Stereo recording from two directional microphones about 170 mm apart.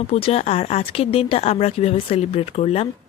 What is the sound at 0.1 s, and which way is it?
Speech, 35° left (ahead or behind).